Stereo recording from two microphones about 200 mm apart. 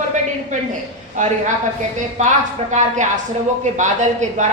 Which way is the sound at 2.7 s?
40° right (ahead or behind).